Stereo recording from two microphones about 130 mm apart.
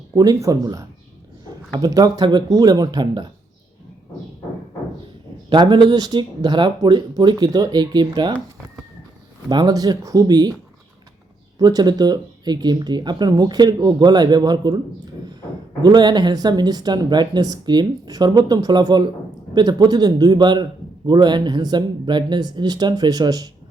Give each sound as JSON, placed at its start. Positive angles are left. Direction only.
{"t": 0.2, "sound": "speech", "side_deg": -30}
{"t": 5.5, "sound": "speech", "side_deg": -35}
{"t": 9.5, "sound": "speech", "side_deg": -30}
{"t": 11.6, "sound": "speech", "side_deg": -35}
{"t": 15.8, "sound": "speech", "side_deg": -35}